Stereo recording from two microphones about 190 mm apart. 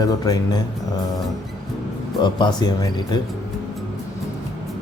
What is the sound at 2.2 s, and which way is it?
Speech, 20° left (ahead or behind).